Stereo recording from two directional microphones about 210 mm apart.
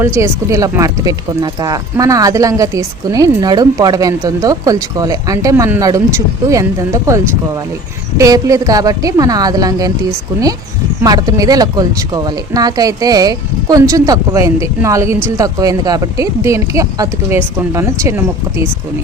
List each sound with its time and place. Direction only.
0.0 s speech: 15° right (ahead or behind)
8.2 s speech: 15° right (ahead or behind)
11.0 s speech: 20° right (ahead or behind)